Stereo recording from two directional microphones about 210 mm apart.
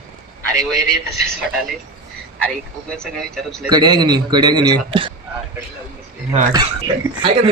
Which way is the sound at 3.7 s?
20° right (ahead or behind).